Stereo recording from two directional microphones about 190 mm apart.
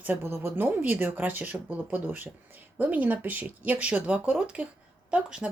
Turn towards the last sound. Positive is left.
turn(degrees=-5)  # may be behind; listen again after turning